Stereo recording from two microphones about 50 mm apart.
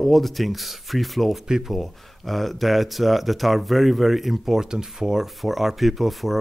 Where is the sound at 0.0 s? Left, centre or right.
Centre.